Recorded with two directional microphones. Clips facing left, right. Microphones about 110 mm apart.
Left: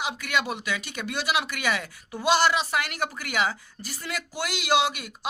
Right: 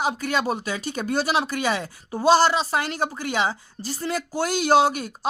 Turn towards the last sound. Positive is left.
turn(degrees=-40)  # may be behind; listen again after turning